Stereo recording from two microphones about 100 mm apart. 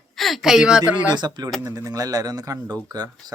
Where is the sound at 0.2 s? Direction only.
Centre (ahead or behind).